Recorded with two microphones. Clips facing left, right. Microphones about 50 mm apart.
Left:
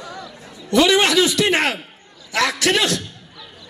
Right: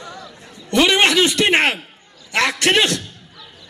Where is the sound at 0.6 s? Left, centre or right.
Right.